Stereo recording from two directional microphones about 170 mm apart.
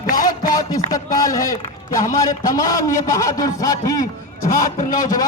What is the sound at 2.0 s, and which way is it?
Speech, 55° left (ahead or behind).